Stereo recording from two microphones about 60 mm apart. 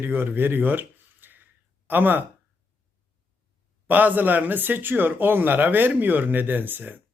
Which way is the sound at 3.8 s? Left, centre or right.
Right.